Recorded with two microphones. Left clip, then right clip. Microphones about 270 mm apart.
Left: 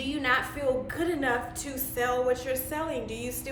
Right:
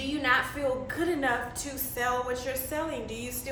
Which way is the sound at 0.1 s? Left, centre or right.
Centre.